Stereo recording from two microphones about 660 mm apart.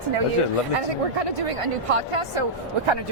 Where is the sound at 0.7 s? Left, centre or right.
Right.